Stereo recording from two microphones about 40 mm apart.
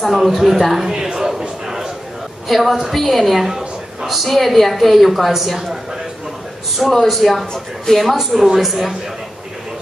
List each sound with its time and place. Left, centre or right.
0.0 s a woman's voice: centre
2.4 s a woman's voice: centre
6.8 s a woman's voice: centre